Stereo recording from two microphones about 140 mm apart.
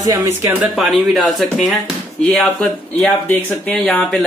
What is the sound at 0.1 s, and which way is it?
Speech, 20° right (ahead or behind).